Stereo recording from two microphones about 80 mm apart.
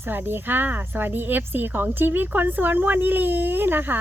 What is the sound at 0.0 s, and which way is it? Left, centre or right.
Speech, right.